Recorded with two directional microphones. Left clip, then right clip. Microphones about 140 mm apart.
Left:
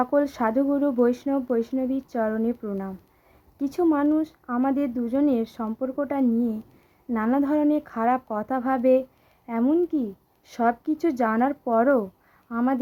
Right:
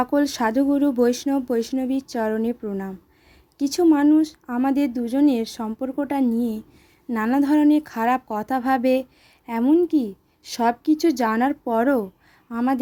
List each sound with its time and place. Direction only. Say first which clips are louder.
0.0 s speech: right 1 dB; 20° right (ahead or behind)
3.6 s speech: right 4 dB; 15° right (ahead or behind)
7.1 s speech: right 2 dB; 25° right (ahead or behind)
7.4 s speech: right 4 dB; 15° right (ahead or behind)